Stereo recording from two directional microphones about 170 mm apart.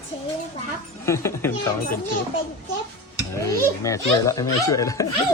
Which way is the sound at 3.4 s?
20° left (ahead or behind).